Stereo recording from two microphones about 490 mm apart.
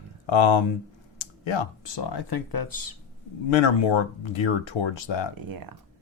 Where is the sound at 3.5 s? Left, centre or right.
Left.